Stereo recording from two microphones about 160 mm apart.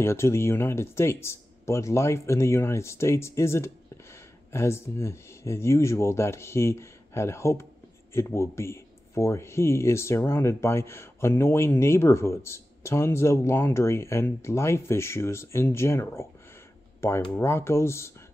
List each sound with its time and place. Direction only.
0.0 s speech: 15° left (ahead or behind)
17.3 s speech: 15° left (ahead or behind)